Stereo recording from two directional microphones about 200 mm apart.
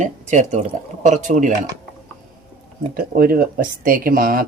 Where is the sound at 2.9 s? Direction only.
45° right (ahead or behind).